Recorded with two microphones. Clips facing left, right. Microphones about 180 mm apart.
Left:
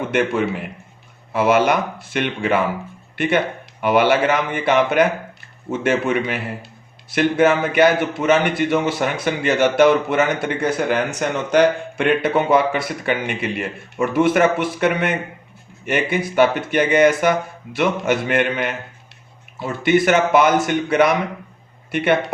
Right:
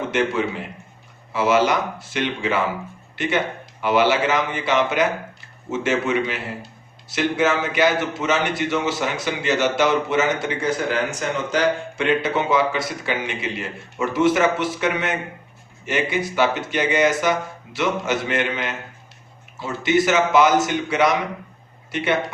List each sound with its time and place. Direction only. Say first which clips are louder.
0.1 s a man's voice: left 3 dB; 55° left (ahead or behind)